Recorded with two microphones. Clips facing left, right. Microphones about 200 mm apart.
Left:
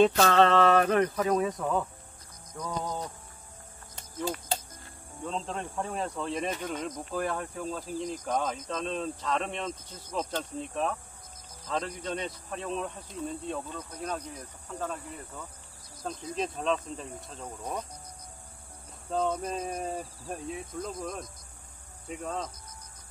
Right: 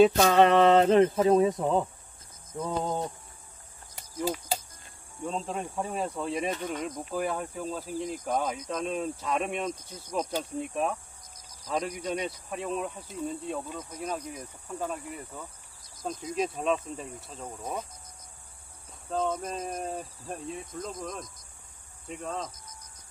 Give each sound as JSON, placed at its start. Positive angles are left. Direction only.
{"t": 0.1, "sound": "speech", "side_deg": -15}
{"t": 4.2, "sound": "cricket", "side_deg": -5}
{"t": 5.2, "sound": "a man's voice", "side_deg": -10}
{"t": 19.0, "sound": "speech", "side_deg": -5}